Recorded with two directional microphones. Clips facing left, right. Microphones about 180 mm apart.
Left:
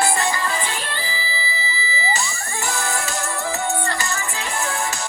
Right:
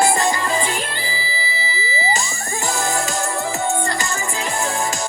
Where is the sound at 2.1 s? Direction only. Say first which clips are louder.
Right 2 dB; 35° right (ahead or behind).